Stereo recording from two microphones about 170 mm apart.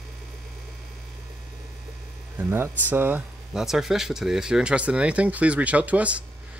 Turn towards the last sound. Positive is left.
turn(degrees=-10)  # may be behind; listen again after turning